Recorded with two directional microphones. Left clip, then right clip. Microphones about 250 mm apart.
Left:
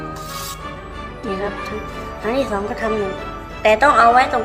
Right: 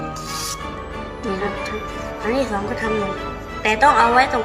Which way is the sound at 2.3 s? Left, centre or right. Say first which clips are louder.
Left 1 dB; centre.